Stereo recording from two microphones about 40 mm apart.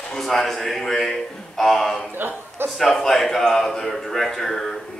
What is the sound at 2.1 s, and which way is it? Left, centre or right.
Speech, right.